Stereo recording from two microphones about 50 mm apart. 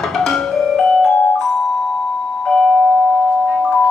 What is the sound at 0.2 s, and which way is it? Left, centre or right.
Music, centre.